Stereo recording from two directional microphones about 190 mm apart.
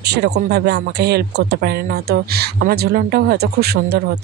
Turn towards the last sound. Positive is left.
turn(degrees=-60)  # may be behind; listen again after turning